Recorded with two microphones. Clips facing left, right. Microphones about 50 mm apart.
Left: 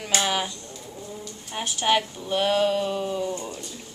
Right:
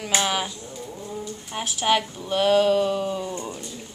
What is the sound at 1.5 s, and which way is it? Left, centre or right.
A man's voice, centre.